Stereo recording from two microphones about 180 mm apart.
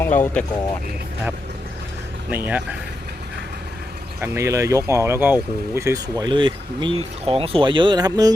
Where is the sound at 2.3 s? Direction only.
10° right (ahead or behind).